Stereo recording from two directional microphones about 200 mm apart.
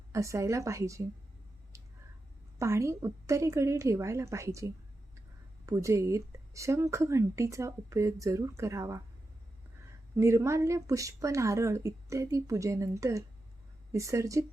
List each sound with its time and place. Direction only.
0.1 s speech: 15° right (ahead or behind)
2.6 s speech: 15° right (ahead or behind)
10.2 s speech: 15° right (ahead or behind)